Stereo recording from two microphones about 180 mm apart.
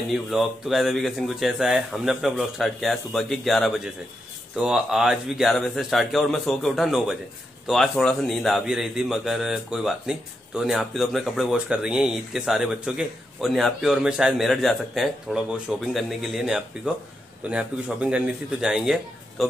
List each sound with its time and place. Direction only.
0.1 s a man's voice: centre (ahead or behind)